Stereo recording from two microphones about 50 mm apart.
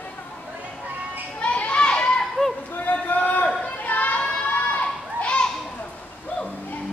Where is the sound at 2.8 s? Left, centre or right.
Left.